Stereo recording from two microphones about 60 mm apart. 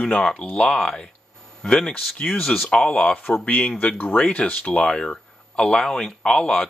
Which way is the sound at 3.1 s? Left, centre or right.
Left.